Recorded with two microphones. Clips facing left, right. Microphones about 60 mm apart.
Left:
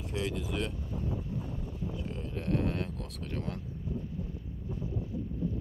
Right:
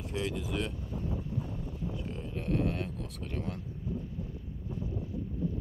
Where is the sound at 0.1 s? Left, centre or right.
Centre.